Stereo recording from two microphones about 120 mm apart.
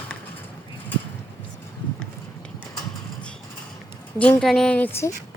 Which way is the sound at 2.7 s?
10° left (ahead or behind).